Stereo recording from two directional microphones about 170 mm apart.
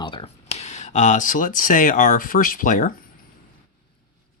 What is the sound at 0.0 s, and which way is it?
Speech, 30° left (ahead or behind).